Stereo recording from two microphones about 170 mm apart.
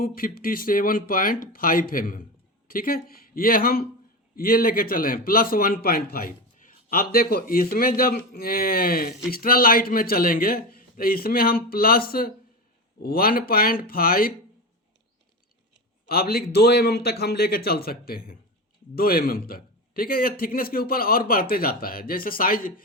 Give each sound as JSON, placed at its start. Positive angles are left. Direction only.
{"t": 0.0, "sound": "a man's voice", "side_deg": 55}
{"t": 16.0, "sound": "a man's voice", "side_deg": 65}